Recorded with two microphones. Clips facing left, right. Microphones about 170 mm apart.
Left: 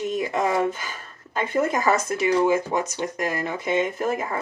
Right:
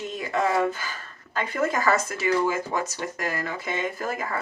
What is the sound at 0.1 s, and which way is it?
Speech, 20° left (ahead or behind).